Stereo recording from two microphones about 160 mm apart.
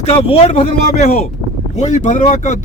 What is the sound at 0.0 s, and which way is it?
Speech, 40° left (ahead or behind).